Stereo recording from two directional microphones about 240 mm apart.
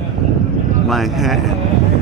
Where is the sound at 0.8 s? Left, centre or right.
Centre.